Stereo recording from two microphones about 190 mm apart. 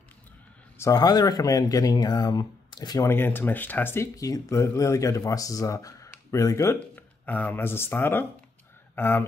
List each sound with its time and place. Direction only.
0.7 s speech: 15° left (ahead or behind)